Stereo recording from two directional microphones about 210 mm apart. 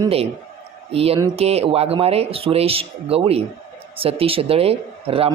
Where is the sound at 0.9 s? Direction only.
30° right (ahead or behind).